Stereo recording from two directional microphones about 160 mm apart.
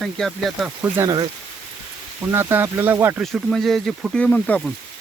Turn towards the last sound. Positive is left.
turn(degrees=10)  # may be behind; listen again after turning